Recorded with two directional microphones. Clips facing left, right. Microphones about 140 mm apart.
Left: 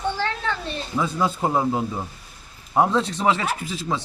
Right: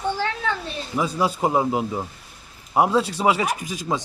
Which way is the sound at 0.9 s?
15° right (ahead or behind).